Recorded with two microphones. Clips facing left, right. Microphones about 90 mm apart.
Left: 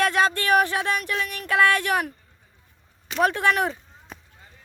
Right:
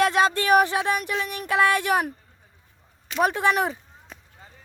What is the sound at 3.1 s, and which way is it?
Speech, 10° right (ahead or behind).